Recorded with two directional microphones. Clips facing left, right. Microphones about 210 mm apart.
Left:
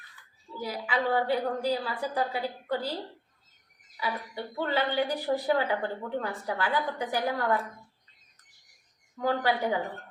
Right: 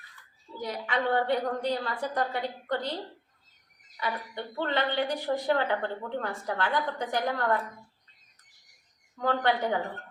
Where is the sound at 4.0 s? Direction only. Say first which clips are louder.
Even; 5° left (ahead or behind).